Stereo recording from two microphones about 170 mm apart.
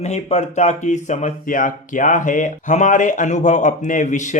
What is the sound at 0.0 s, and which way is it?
Speech, 40° left (ahead or behind).